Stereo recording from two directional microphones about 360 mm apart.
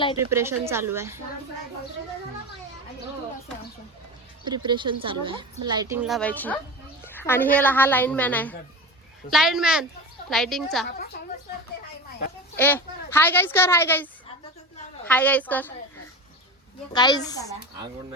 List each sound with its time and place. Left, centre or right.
0.3 s a woman's voice: centre
4.4 s a woman's voice: centre
10.8 s a woman's voice: left
12.5 s speech: centre
16.9 s a woman's voice: centre